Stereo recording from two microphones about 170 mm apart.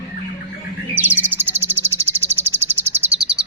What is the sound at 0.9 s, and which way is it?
Bird, 10° right (ahead or behind).